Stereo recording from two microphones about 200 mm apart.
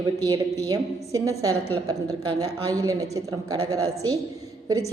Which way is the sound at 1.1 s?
15° right (ahead or behind).